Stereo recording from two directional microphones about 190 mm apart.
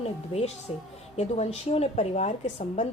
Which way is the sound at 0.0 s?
35° left (ahead or behind).